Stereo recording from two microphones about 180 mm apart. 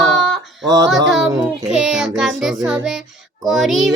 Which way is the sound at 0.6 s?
20° right (ahead or behind).